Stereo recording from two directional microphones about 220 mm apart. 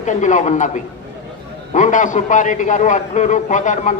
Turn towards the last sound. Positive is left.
turn(degrees=35)  # may be behind; listen again after turning